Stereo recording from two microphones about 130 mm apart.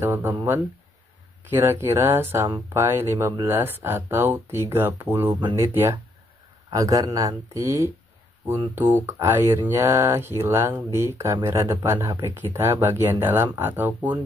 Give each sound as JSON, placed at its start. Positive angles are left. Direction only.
{"t": 0.0, "sound": "speech", "side_deg": -20}
{"t": 1.5, "sound": "speech", "side_deg": -15}